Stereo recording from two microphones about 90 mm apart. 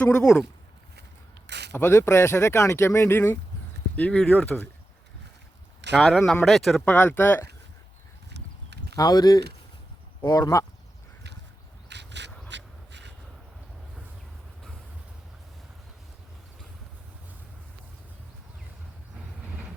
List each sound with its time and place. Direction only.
0.0 s speech: 10° left (ahead or behind)
1.7 s speech: 25° left (ahead or behind)
3.9 s speech: 15° left (ahead or behind)
5.9 s speech: centre (ahead or behind)
6.8 s speech: 20° left (ahead or behind)
9.0 s speech: 45° left (ahead or behind)